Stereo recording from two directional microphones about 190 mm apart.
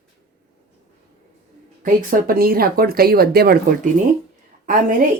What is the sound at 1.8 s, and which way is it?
Speech, 50° right (ahead or behind).